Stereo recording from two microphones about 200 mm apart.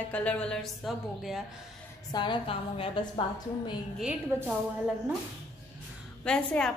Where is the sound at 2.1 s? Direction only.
25° left (ahead or behind).